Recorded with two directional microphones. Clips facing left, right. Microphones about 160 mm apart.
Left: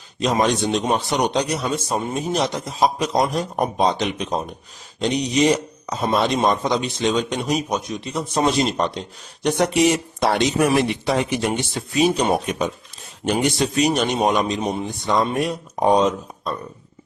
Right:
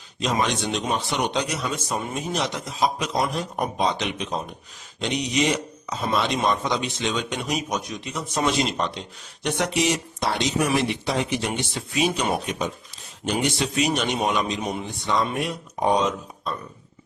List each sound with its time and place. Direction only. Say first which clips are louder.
0.2 s speech: left 5 dB; 40° left (ahead or behind)
9.8 s speech: left 6 dB; 55° left (ahead or behind)
12.0 s speech: left 5 dB; 35° left (ahead or behind)
12.5 s speech: left 4 dB; 50° left (ahead or behind)